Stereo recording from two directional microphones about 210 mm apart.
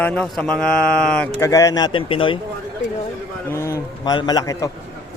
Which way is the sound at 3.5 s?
15° left (ahead or behind).